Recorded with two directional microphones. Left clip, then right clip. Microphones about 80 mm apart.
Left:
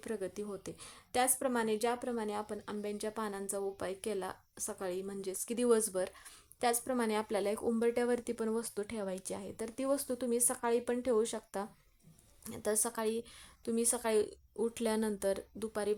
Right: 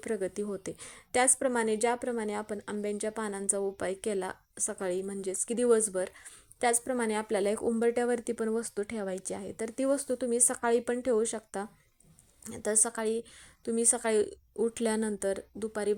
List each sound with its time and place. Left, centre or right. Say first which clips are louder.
0.0 s a woman's voice: right 7 dB; right
1.4 s a woman's voice: right 5 dB; right
5.5 s speech: right 4 dB; centre
6.6 s a woman's voice: right 4 dB; right
7.4 s a woman's voice: right 5 dB; right
7.7 s speech: right 2 dB; right
10.0 s speech: right 5 dB; right
10.3 s a woman's voice: right 5 dB; right
10.9 s speech: right 4 dB; right